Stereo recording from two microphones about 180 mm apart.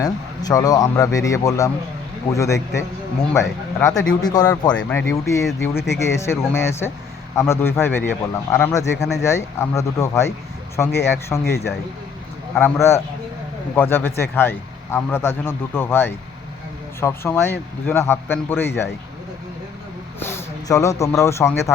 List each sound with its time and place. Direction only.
0.0 s speech: 20° left (ahead or behind)
4.7 s speech: 5° left (ahead or behind)
12.5 s speech: 15° left (ahead or behind)
20.1 s a sound: 15° left (ahead or behind)
21.0 s speech: 15° left (ahead or behind)